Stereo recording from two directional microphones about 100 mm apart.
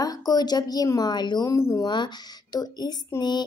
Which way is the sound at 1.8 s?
45° left (ahead or behind).